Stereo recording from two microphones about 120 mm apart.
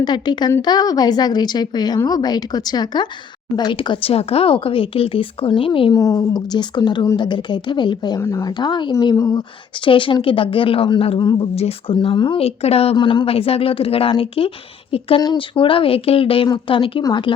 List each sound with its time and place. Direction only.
0.0 s a woman's voice: 35° left (ahead or behind)
5.9 s a woman's voice: 30° left (ahead or behind)
8.2 s speech: 25° left (ahead or behind)
8.5 s a woman's voice: 40° left (ahead or behind)
9.8 s a woman's voice: 45° left (ahead or behind)
11.2 s a woman's voice: 35° left (ahead or behind)
11.5 s a woman's voice: 55° left (ahead or behind)